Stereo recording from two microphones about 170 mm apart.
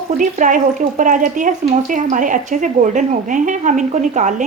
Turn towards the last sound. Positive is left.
turn(degrees=-45)  # may be behind; listen again after turning